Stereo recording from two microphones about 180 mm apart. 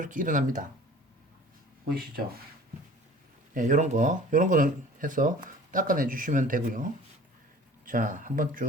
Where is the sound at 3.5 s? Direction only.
45° right (ahead or behind).